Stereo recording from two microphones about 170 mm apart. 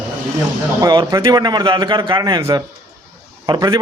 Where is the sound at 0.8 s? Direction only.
20° right (ahead or behind).